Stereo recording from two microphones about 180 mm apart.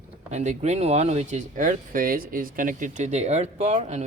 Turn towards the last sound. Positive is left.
turn(degrees=-35)  # may be behind; listen again after turning